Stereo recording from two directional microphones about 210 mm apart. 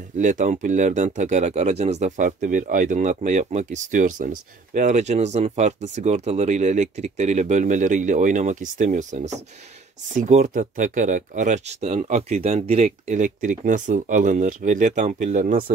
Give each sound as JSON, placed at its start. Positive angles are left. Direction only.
{"t": 0.2, "sound": "speech", "side_deg": -35}